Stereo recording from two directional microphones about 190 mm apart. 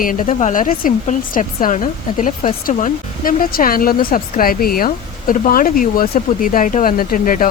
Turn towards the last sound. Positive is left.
turn(degrees=45)  # may be behind; listen again after turning